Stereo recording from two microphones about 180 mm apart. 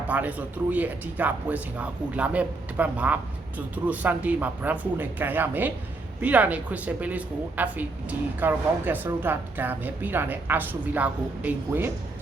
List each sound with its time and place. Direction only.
0.1 s speech: 10° right (ahead or behind)